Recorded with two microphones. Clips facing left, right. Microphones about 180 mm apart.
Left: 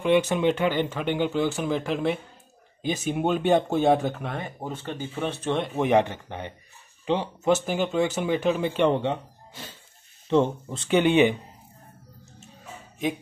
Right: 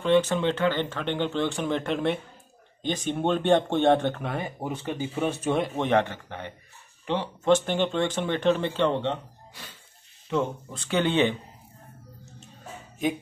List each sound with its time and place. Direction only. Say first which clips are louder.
0.0 s speech: left 1 dB; 10° left (ahead or behind); by 5.7 s 5° right (ahead or behind)
5.8 s speech: left 2 dB; 15° left (ahead or behind)
9.6 s music: left 5 dB; 25° left (ahead or behind)
10.3 s speech: left 5 dB; 25° left (ahead or behind)
13.0 s speech: right 1 dB; centre (ahead or behind)